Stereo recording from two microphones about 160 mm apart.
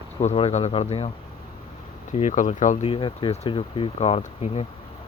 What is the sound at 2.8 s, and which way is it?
Speech, 30° left (ahead or behind).